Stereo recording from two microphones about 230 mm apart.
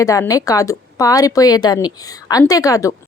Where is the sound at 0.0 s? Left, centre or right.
Centre.